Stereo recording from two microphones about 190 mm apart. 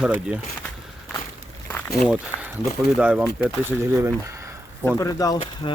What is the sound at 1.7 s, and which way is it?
Walk, 10° left (ahead or behind).